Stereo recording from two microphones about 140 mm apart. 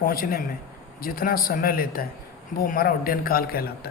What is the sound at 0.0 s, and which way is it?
Speech, 90° left.